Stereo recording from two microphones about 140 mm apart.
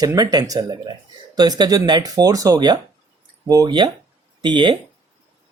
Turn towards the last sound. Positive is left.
turn(degrees=-35)  # may be behind; listen again after turning